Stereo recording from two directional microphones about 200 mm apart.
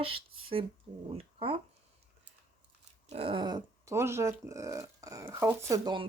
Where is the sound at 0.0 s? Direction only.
25° right (ahead or behind).